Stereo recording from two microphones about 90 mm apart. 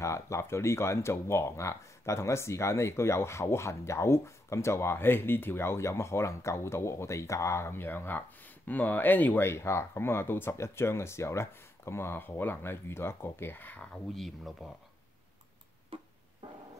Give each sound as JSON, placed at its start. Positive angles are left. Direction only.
{"t": 0.0, "sound": "speech", "side_deg": 30}
{"t": 14.1, "sound": "speech", "side_deg": 0}